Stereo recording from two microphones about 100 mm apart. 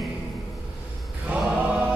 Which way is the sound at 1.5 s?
15° right (ahead or behind).